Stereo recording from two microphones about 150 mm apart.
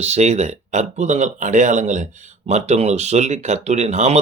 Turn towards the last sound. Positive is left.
turn(degrees=-50)  # may be behind; listen again after turning